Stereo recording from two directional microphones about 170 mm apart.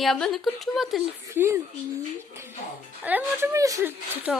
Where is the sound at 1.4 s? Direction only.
10° right (ahead or behind).